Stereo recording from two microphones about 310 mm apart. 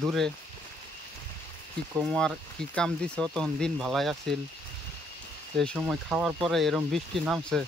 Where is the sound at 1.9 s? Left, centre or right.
Centre.